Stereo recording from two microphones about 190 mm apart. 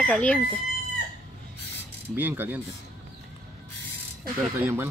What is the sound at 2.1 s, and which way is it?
Speech, 10° right (ahead or behind).